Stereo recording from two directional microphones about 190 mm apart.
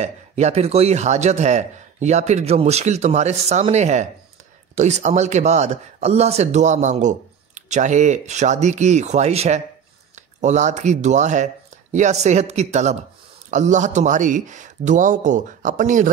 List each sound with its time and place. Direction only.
0.0 s speech: 35° right (ahead or behind)